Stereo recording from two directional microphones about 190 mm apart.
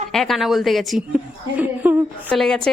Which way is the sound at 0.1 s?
Centre (ahead or behind).